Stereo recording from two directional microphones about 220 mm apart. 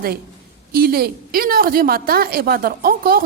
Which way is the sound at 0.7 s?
45° right (ahead or behind).